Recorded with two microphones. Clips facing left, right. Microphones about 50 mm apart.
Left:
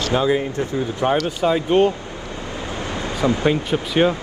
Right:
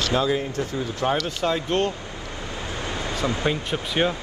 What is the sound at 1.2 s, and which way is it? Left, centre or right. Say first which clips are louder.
Speech: left 5 dB; centre.